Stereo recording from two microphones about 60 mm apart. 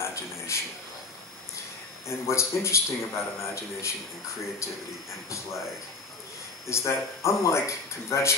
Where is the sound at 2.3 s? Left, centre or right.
Left.